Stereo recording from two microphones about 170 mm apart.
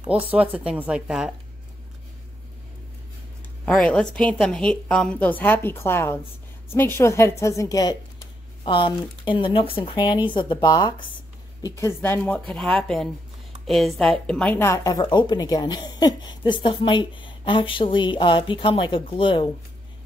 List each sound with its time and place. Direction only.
0.1 s a woman's voice: 10° right (ahead or behind)
3.6 s a woman's voice: 5° left (ahead or behind); by 19.5 s 30° left (ahead or behind)